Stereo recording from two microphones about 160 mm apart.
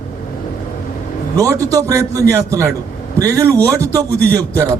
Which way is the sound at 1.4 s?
20° right (ahead or behind).